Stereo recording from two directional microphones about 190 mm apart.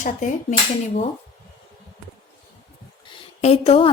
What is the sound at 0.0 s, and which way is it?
Speech, 40° left (ahead or behind).